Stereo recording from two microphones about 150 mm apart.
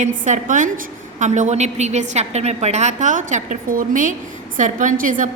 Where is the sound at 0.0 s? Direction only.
60° right (ahead or behind).